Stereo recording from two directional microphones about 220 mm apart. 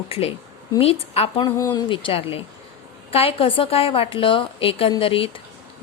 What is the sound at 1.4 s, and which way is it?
A woman's voice, 15° left (ahead or behind).